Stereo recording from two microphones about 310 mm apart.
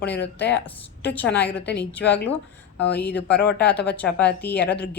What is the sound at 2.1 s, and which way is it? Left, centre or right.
Speech, left.